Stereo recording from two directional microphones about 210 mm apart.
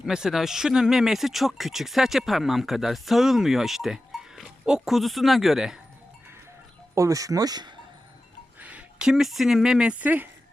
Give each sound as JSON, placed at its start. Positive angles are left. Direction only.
{"t": 0.0, "sound": "speech", "side_deg": -5}
{"t": 6.9, "sound": "speech", "side_deg": -15}
{"t": 8.5, "sound": "speech", "side_deg": -5}